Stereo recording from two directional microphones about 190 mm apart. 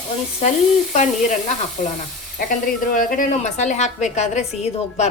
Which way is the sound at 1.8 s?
40° left (ahead or behind).